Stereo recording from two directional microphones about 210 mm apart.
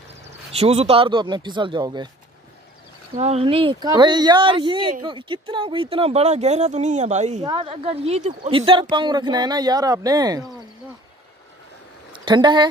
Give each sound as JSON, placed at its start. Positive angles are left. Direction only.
{"t": 0.6, "sound": "speech", "side_deg": -30}
{"t": 3.2, "sound": "speech", "side_deg": -30}
{"t": 7.4, "sound": "speech", "side_deg": -20}
{"t": 12.1, "sound": "speech", "side_deg": -20}